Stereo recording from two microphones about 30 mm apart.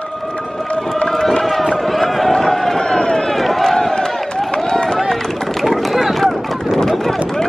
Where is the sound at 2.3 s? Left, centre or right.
Centre.